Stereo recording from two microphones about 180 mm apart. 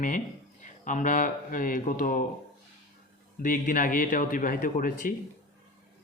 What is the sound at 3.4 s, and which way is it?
A man's voice, 50° left (ahead or behind).